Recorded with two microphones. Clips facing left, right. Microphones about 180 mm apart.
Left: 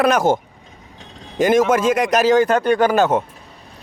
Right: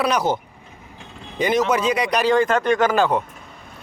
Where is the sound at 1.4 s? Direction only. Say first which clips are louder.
Left 4 dB; 50° left (ahead or behind).